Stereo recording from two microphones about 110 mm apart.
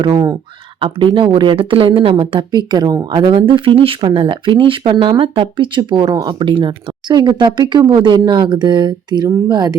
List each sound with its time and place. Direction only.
0.0 s speech: 35° right (ahead or behind)
0.8 s speech: 50° right (ahead or behind)
2.5 s speech: 40° right (ahead or behind)
6.1 s speech: 30° right (ahead or behind)
6.4 s speech: 50° right (ahead or behind)